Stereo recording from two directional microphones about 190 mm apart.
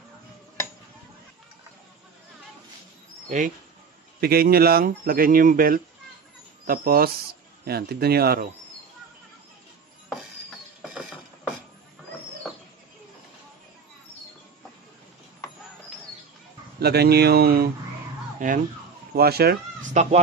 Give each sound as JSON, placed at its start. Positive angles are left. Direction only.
{"t": 3.3, "sound": "speech", "side_deg": -45}
{"t": 4.2, "sound": "speech", "side_deg": -55}
{"t": 10.8, "sound": "mechanisms", "side_deg": -5}
{"t": 16.8, "sound": "speech", "side_deg": -55}
{"t": 19.1, "sound": "speech", "side_deg": -55}